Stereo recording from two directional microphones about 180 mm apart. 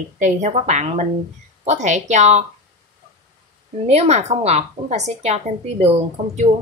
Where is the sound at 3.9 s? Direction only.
35° right (ahead or behind).